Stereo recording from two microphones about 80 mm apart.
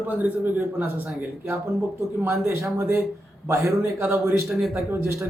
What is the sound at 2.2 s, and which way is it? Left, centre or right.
A man's voice, right.